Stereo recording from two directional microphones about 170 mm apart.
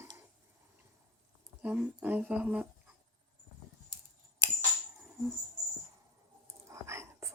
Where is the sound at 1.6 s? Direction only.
10° right (ahead or behind).